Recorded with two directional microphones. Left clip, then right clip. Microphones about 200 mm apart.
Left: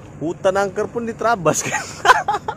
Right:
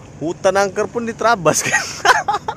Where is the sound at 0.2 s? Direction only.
10° right (ahead or behind).